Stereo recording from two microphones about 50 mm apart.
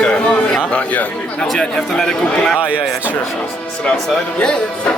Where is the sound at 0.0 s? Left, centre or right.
Centre.